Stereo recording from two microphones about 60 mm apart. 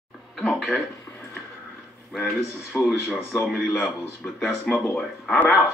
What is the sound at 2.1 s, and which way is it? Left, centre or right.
A man's voice, centre.